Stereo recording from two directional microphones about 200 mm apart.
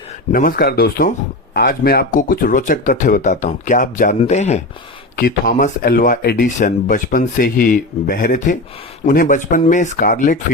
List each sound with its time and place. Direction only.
0.3 s speech: 45° left (ahead or behind)
5.1 s speech: 45° left (ahead or behind)